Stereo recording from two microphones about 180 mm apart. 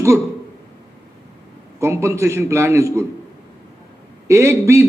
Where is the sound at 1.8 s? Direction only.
15° right (ahead or behind).